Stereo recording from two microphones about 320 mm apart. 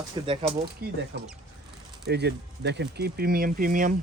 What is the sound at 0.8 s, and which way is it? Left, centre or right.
Speech, right.